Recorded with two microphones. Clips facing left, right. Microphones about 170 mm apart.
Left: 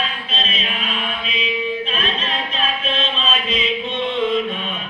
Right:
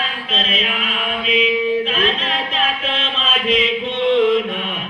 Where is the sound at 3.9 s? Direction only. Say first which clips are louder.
Right 7 dB; 90° right.